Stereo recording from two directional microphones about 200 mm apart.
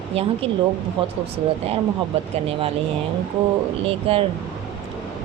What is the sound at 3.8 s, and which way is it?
Speech, 30° right (ahead or behind).